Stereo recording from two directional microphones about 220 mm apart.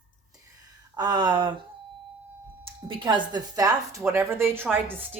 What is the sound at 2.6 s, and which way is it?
Speech, 20° right (ahead or behind).